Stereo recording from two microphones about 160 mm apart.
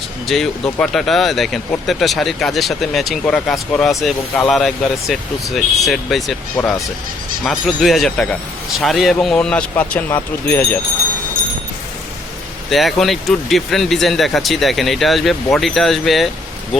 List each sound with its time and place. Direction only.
0.3 s speech: 5° left (ahead or behind)
12.7 s speech: centre (ahead or behind)